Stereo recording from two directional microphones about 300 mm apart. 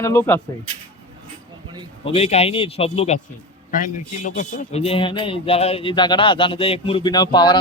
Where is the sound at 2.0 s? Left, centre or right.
Centre.